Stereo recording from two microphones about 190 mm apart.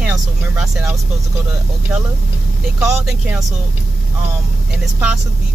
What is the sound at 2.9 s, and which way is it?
Speech, centre (ahead or behind).